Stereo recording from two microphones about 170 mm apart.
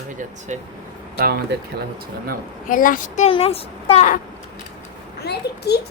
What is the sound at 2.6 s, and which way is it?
Speech, 55° left (ahead or behind).